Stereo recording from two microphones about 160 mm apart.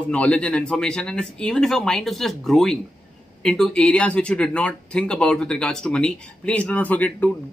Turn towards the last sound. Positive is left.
turn(degrees=10)  # may be behind; listen again after turning